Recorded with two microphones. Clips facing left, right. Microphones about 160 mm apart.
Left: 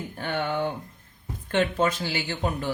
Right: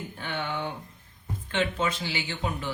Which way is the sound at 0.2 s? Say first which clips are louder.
Left 6 dB; 50° left (ahead or behind).